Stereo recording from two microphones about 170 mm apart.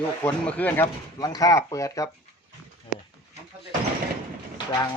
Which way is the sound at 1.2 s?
20° left (ahead or behind).